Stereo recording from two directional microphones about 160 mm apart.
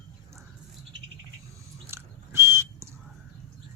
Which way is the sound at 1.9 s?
15° right (ahead or behind).